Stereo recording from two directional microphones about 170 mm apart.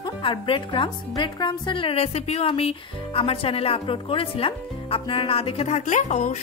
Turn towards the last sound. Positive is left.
turn(degrees=45)  # may be behind; listen again after turning